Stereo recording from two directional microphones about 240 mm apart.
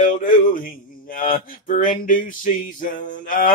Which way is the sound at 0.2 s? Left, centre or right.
Left.